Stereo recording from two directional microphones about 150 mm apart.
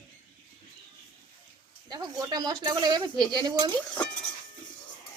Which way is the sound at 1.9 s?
25° right (ahead or behind).